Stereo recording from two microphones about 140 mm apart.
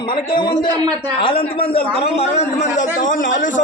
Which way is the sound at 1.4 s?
40° left (ahead or behind).